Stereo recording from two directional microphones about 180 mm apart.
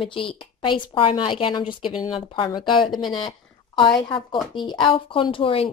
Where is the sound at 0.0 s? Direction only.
30° left (ahead or behind).